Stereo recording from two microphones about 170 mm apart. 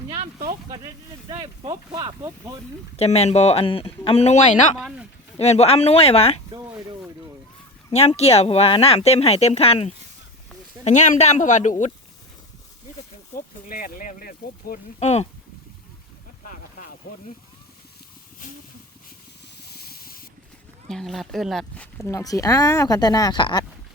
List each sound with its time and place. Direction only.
1.3 s speech: 25° right (ahead or behind)
2.9 s speech: 40° left (ahead or behind)
4.8 s speech: 5° right (ahead or behind)
5.4 s speech: 40° left (ahead or behind)
7.9 s speech: 40° left (ahead or behind)
13.3 s a sound: 55° left (ahead or behind)
14.9 s speech: 40° left (ahead or behind)
17.0 s speech: 60° left (ahead or behind)
19.6 s a sound: 65° left (ahead or behind)
20.8 s speech: centre (ahead or behind)
22.1 s speech: 20° left (ahead or behind)